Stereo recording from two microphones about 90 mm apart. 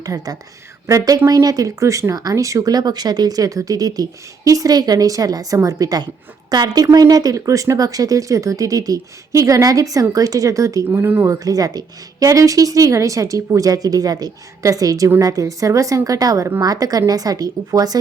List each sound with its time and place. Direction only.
0.0 s speech: 45° right (ahead or behind)
10.8 s speech: 25° right (ahead or behind)
11.3 s speech: 40° right (ahead or behind)